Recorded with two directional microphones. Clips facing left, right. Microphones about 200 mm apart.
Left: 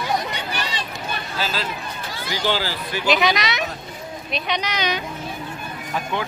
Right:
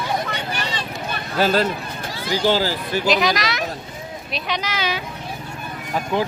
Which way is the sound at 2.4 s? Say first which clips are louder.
Right 4 dB; 40° right (ahead or behind).